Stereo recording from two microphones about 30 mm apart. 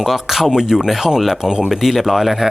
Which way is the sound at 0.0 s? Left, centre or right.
Centre.